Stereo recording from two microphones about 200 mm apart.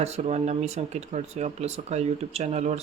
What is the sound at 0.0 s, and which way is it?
Speech, 30° right (ahead or behind).